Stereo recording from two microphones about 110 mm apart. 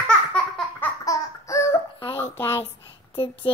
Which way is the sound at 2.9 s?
50° left (ahead or behind).